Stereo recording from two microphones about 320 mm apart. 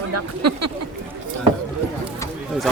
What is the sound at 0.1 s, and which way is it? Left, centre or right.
Speech, right.